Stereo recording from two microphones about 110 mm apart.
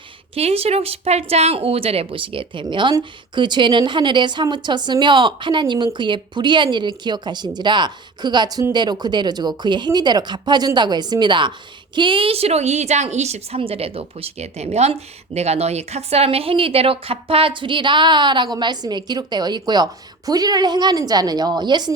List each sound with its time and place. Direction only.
0.3 s a woman's voice: 65° right (ahead or behind); by 21.9 s 40° right (ahead or behind)